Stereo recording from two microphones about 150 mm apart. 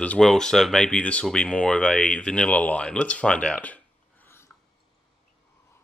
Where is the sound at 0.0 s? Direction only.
5° left (ahead or behind).